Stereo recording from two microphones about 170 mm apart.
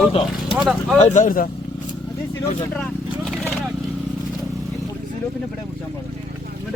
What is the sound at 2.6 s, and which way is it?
Speech, 5° left (ahead or behind).